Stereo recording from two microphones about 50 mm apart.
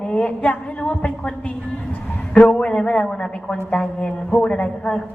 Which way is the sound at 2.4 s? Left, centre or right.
Centre.